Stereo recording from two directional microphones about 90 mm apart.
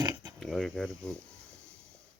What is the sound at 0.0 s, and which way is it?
Mechanisms, 45° right (ahead or behind).